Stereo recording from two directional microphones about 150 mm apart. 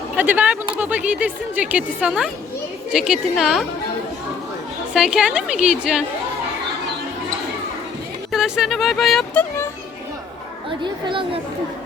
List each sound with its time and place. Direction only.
0.2 s a woman's voice: 10° right (ahead or behind)
4.9 s speech: 5° right (ahead or behind)
8.3 s speech: 5° right (ahead or behind)
11.0 s speech: 35° right (ahead or behind)